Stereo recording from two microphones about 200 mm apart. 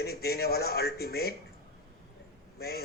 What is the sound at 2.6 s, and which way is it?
Speech, 50° left (ahead or behind).